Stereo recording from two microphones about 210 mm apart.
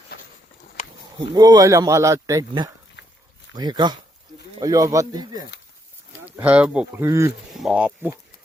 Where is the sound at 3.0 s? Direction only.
55° left (ahead or behind).